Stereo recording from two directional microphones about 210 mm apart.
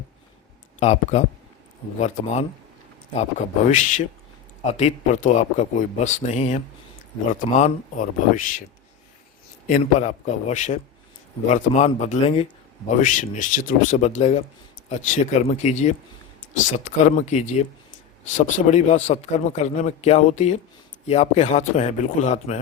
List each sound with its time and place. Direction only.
0.8 s a man's voice: 30° left (ahead or behind)
9.6 s a man's voice: 40° left (ahead or behind)
13.0 s a man's voice: 40° left (ahead or behind)